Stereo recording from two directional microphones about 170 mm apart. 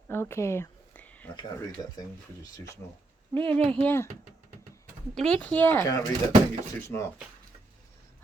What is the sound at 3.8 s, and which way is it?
Speech, 15° left (ahead or behind).